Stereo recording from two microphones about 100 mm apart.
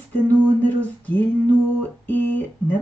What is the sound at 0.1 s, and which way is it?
Speech, 15° left (ahead or behind).